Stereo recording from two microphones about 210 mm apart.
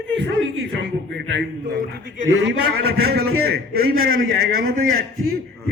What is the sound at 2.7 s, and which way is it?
A man's voice, 50° right (ahead or behind).